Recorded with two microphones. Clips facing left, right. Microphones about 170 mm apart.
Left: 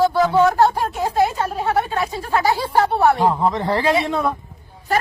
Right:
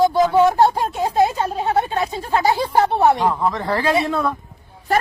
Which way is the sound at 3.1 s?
20° left (ahead or behind).